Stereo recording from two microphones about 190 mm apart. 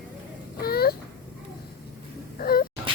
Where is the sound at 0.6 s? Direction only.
55° left (ahead or behind).